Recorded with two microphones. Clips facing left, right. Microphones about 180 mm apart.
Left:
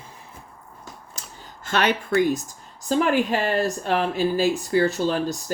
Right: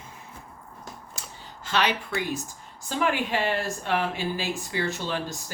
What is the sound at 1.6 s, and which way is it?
Speech, 50° left (ahead or behind).